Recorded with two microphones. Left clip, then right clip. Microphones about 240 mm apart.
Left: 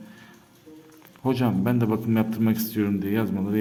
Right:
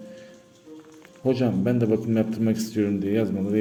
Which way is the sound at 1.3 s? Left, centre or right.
Centre.